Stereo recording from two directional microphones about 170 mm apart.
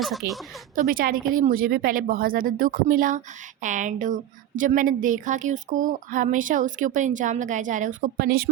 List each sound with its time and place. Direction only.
0.0 s speech: centre (ahead or behind)
0.9 s a woman's voice: 55° right (ahead or behind)